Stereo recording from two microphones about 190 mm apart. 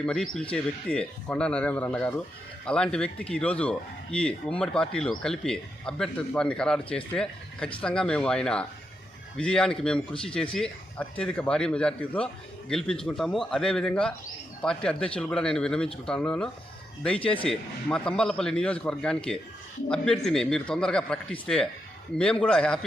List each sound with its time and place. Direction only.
0.0 s speech: 5° left (ahead or behind)